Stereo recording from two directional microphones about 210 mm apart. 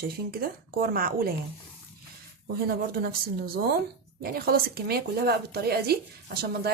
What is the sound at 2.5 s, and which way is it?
A woman's voice, 45° right (ahead or behind).